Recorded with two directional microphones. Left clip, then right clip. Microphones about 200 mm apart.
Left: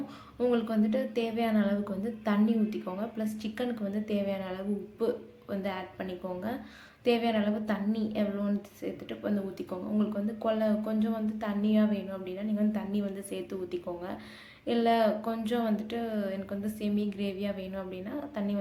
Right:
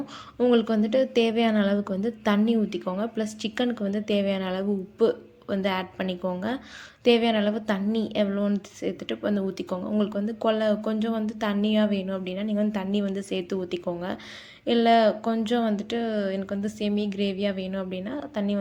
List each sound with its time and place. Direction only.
0.3 s a woman's voice: 30° right (ahead or behind)